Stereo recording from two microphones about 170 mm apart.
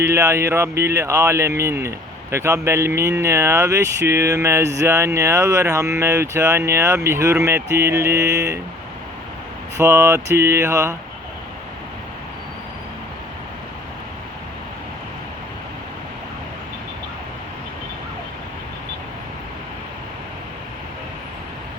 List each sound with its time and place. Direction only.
0.0 s speech: 15° right (ahead or behind)
9.7 s speech: 15° right (ahead or behind)